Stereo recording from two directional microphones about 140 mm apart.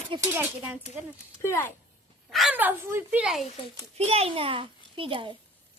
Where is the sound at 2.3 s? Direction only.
Centre (ahead or behind).